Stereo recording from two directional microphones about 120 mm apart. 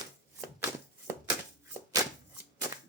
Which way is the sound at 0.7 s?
20° right (ahead or behind).